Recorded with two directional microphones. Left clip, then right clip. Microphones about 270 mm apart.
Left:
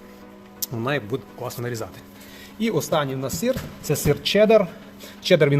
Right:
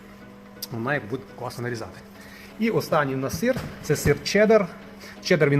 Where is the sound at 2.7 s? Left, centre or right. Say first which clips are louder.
Even; left.